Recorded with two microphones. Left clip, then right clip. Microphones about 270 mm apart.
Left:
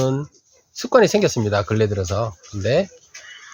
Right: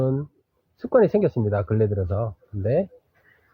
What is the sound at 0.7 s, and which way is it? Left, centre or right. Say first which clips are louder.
Speech: left 3 dB; centre.